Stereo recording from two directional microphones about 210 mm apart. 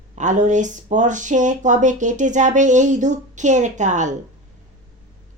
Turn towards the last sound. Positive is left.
turn(degrees=-35)  # may be behind; listen again after turning